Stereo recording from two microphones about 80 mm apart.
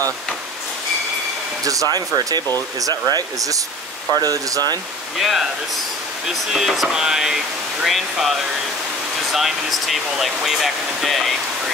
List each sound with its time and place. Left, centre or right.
1.6 s speech: right
6.2 s speech: centre